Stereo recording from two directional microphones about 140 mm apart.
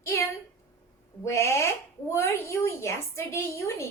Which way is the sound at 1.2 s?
20° left (ahead or behind).